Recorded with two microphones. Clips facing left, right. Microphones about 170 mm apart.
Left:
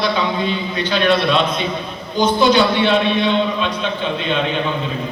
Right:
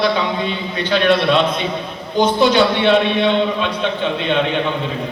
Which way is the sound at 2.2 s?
60° right (ahead or behind).